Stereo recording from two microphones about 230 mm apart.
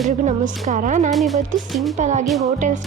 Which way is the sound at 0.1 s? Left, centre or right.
Right.